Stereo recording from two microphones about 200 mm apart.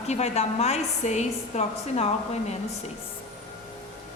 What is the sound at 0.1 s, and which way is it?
A woman's voice, 35° left (ahead or behind).